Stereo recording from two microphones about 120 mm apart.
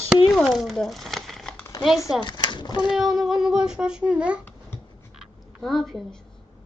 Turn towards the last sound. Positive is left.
turn(degrees=0)  # may be behind; listen again after turning